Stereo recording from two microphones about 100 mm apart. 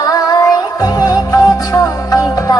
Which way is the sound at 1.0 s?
35° left (ahead or behind).